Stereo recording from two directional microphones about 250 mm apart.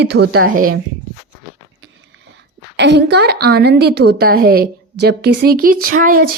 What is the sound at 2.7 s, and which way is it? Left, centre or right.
A woman's voice, right.